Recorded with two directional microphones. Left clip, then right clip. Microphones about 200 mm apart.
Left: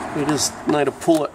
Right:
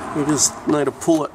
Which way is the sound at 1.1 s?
25° right (ahead or behind).